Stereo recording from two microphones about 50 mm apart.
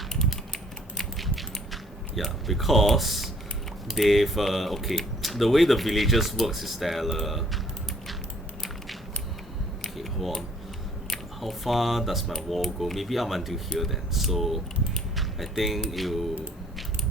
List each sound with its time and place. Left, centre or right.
0.1 s typing: centre
0.9 s a sound: centre
3.8 s speech: centre
9.8 s typing: centre
11.1 s speech: centre